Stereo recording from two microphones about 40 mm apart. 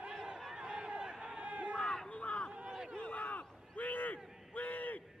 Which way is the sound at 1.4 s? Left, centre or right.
Right.